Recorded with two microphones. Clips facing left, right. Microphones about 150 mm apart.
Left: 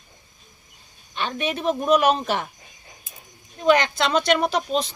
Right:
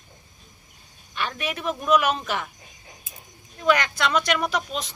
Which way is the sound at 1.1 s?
25° left (ahead or behind).